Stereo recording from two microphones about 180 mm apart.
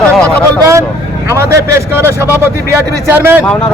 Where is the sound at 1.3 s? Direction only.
15° right (ahead or behind).